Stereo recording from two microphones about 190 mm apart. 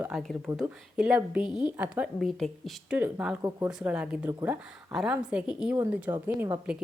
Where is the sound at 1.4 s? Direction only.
20° left (ahead or behind).